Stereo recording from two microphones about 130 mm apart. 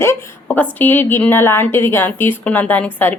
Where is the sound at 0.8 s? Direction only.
15° left (ahead or behind).